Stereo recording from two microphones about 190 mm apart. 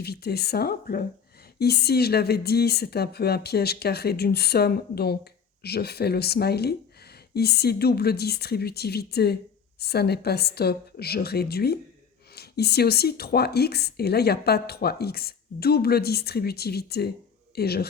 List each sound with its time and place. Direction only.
0.0 s a woman's voice: 55° left (ahead or behind)